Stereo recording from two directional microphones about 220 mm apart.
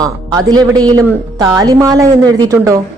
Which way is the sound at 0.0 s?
15° right (ahead or behind).